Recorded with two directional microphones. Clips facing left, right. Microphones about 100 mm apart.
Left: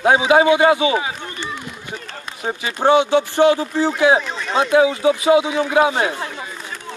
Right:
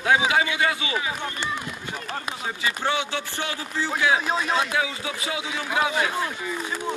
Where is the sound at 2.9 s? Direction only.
20° left (ahead or behind).